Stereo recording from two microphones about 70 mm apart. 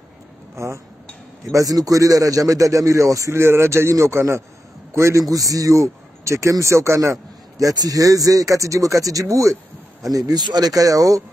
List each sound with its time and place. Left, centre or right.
0.6 s speech: right
1.5 s a man's voice: right
5.2 s speech: right
10.1 s speech: right